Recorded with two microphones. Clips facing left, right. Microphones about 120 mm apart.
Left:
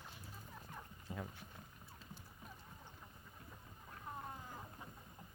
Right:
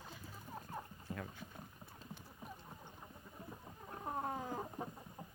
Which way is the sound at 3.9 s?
60° right (ahead or behind).